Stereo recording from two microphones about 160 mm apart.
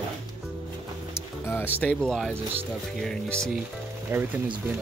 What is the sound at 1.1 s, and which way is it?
Music, 15° left (ahead or behind).